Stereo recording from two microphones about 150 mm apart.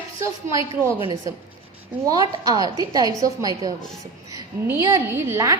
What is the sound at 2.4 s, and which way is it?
A woman's voice, 25° right (ahead or behind).